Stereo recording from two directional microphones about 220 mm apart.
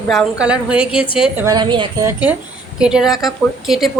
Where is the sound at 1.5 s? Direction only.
20° right (ahead or behind).